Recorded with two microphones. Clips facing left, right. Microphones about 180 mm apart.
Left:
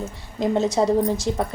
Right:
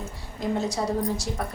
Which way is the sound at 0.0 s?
20° left (ahead or behind).